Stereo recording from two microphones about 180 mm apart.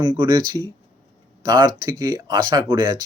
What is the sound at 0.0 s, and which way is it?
Speech, 25° right (ahead or behind).